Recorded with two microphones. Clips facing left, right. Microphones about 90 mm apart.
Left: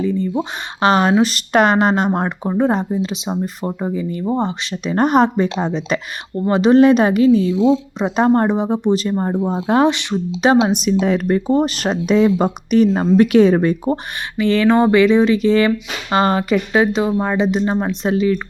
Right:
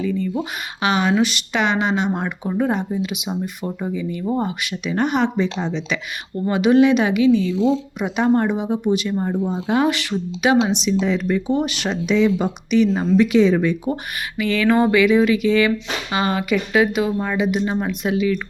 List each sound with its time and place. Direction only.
0.0 s speech: 30° left (ahead or behind)
6.5 s speech: 35° left (ahead or behind)
9.9 s speech: 20° left (ahead or behind)
10.4 s speech: 40° left (ahead or behind)